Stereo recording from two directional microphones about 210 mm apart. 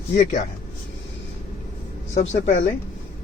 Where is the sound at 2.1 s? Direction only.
35° left (ahead or behind).